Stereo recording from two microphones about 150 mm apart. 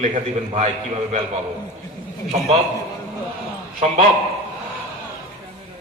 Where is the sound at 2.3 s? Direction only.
45° right (ahead or behind).